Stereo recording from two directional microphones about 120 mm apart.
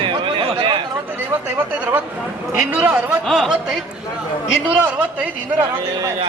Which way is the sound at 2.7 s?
10° right (ahead or behind).